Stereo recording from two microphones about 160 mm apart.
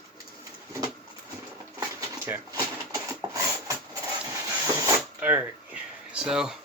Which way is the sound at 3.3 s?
20° right (ahead or behind).